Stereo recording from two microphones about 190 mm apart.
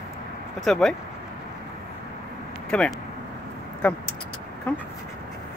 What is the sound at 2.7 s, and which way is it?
Speech, 5° left (ahead or behind).